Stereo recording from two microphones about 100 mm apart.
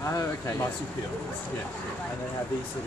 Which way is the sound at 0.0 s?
35° left (ahead or behind).